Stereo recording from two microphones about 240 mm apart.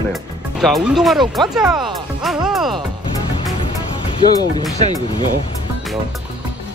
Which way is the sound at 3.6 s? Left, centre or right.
Left.